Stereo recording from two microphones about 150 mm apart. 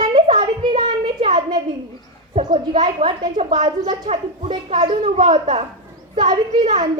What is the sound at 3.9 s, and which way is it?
A woman's voice, 50° right (ahead or behind).